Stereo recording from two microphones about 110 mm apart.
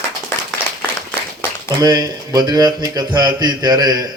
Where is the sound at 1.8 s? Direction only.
35° right (ahead or behind).